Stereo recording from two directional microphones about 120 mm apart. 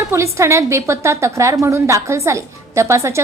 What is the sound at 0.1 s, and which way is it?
A woman's voice, 25° right (ahead or behind).